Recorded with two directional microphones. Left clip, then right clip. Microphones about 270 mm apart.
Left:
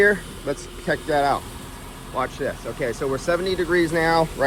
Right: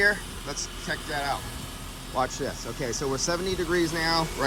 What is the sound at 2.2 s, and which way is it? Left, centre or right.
Speech, centre.